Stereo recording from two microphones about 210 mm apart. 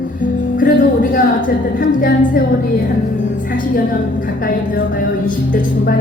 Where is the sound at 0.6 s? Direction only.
40° left (ahead or behind).